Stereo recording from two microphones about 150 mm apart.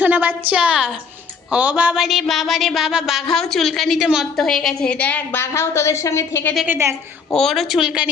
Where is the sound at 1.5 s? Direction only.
5° right (ahead or behind); by 6.5 s 20° left (ahead or behind).